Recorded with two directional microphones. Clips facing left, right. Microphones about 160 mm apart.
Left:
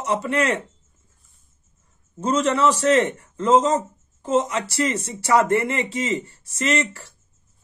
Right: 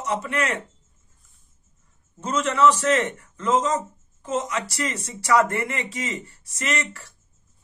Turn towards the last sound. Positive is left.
turn(degrees=30)  # may be behind; listen again after turning